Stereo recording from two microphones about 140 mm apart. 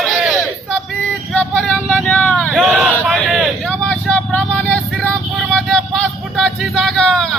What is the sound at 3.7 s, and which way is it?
Vehicle, 10° left (ahead or behind).